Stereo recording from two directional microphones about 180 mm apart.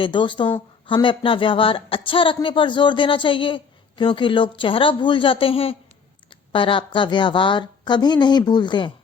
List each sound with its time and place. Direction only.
0.0 s speech: 25° left (ahead or behind)